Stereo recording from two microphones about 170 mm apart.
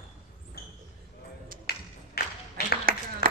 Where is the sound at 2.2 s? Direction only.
65° left (ahead or behind).